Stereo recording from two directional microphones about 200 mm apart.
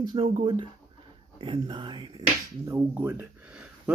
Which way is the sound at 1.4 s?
25° right (ahead or behind).